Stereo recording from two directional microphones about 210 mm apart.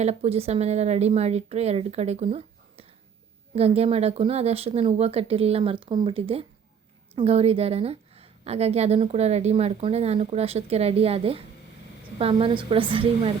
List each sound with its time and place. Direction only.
0.0 s a woman's voice: 30° right (ahead or behind)